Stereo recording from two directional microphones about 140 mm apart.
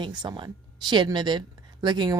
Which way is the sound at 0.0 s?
30° right (ahead or behind).